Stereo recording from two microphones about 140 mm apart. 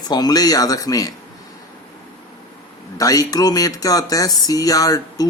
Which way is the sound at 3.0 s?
25° left (ahead or behind).